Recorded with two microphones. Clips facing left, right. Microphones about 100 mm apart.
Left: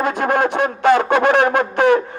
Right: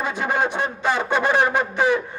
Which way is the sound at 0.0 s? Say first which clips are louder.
Left 5 dB; 50° left (ahead or behind).